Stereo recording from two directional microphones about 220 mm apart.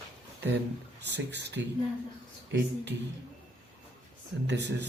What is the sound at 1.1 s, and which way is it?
Speech, 50° right (ahead or behind).